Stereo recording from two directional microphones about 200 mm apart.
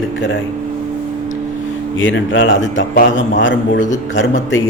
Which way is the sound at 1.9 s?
70° left (ahead or behind).